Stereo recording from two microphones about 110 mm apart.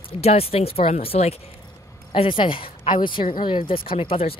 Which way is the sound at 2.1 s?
50° left (ahead or behind).